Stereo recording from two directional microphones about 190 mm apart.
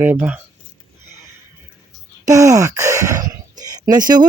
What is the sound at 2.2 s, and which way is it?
Groan, 15° right (ahead or behind).